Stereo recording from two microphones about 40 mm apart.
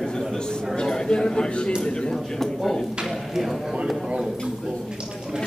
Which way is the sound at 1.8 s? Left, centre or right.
Left.